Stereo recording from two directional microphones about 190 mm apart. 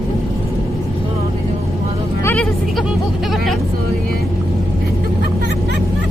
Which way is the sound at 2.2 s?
5° left (ahead or behind).